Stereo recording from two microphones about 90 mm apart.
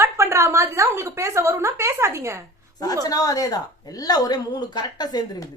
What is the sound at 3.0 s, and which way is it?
A woman's voice, 40° left (ahead or behind).